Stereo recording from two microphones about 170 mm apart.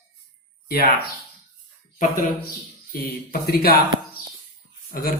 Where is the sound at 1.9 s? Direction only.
50° left (ahead or behind).